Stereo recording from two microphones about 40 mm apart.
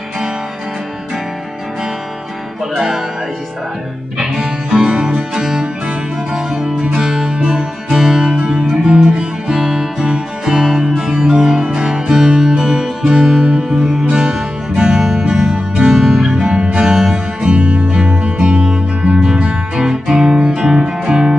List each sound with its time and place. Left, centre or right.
4.2 s music: centre
10.4 s music: centre